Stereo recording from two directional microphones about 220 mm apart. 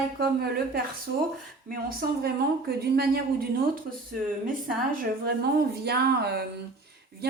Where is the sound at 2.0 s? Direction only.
45° right (ahead or behind).